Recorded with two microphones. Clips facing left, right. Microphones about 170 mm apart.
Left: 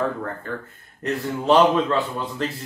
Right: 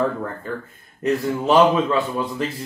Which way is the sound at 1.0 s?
10° right (ahead or behind).